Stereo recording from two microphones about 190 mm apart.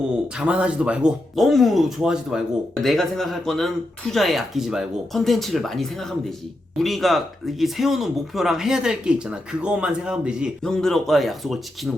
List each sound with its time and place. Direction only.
0.3 s speech: 5° right (ahead or behind)